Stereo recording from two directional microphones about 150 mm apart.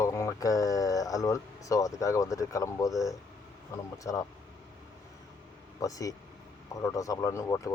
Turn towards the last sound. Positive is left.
turn(degrees=20)  # may be behind; listen again after turning